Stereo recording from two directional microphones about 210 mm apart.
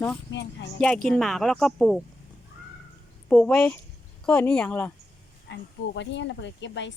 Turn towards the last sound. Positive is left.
turn(degrees=60)  # may be behind; listen again after turning